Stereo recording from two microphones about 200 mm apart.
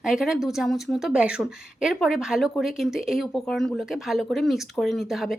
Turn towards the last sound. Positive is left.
turn(degrees=0)  # may be behind; listen again after turning